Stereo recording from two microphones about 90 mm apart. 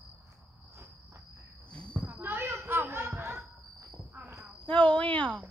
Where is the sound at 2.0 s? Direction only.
20° right (ahead or behind).